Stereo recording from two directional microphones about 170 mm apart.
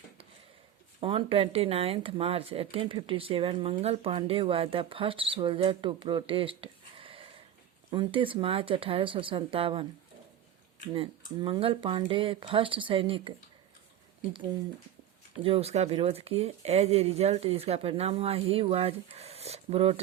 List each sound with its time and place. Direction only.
0.9 s speech: 30° right (ahead or behind)
11.3 s speech: 30° right (ahead or behind)
15.4 s speech: 35° right (ahead or behind)